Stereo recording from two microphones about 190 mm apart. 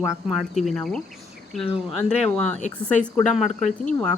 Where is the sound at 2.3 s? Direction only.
5° left (ahead or behind).